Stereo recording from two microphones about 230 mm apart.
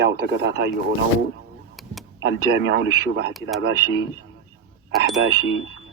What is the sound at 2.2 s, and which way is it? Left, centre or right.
Speech, right.